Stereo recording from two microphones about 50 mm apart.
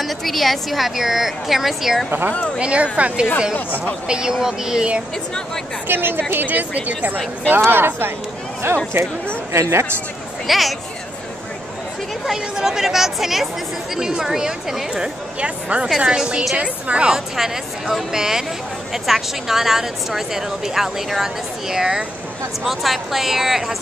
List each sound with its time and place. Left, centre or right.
0.0 s a woman's voice: centre
2.0 s speech: right
2.6 s speech: right
3.5 s speech: left
4.1 s a woman's voice: centre
5.9 s a woman's voice: right
7.4 s speech: right
9.5 s a woman's voice: right
10.4 s a woman's voice: centre
12.5 s a woman's voice: centre
15.4 s a woman's voice: right; by 23.8 s centre